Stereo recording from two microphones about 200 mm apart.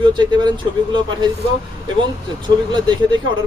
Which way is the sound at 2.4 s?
20° right (ahead or behind).